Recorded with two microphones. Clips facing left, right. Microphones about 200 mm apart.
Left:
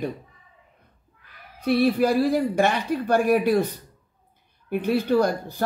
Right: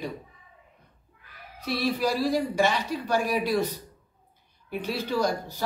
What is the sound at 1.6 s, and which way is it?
Speech, 55° left (ahead or behind).